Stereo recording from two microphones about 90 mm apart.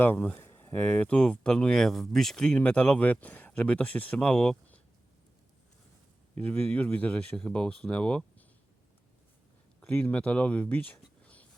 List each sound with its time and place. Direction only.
0.0 s speech: 20° left (ahead or behind)
6.4 s speech: 15° left (ahead or behind)
9.8 s speech: 15° left (ahead or behind)
11.2 s a sound: 15° left (ahead or behind)